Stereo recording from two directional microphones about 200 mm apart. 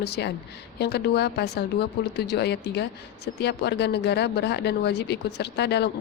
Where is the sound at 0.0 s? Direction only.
55° left (ahead or behind).